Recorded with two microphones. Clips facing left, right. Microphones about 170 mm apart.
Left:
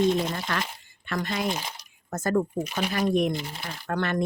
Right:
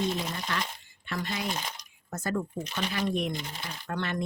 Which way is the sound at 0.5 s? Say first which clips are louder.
Left 3 dB; 50° left (ahead or behind).